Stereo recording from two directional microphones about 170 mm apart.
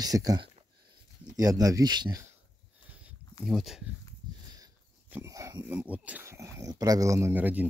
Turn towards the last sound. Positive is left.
turn(degrees=-10)  # may be behind; listen again after turning